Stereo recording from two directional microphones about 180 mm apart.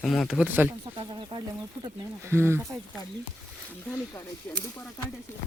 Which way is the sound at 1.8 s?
15° right (ahead or behind).